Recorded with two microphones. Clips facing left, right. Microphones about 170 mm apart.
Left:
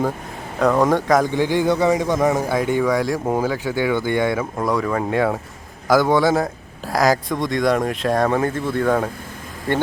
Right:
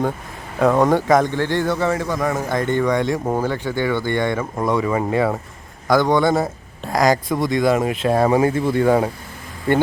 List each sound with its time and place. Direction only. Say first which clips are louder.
0.6 s speech: right 1 dB; centre (ahead or behind)
1.3 s a man's voice: left 2 dB; 10° left (ahead or behind)
2.5 s speech: even; 5° left (ahead or behind)